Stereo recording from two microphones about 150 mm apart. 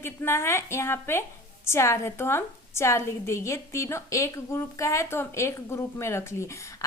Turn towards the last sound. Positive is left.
turn(degrees=20)  # may be behind; listen again after turning